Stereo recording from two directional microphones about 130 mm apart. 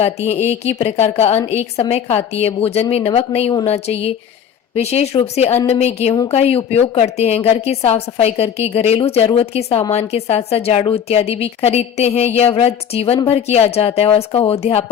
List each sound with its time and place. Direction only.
0.0 s a woman's voice: 55° left (ahead or behind)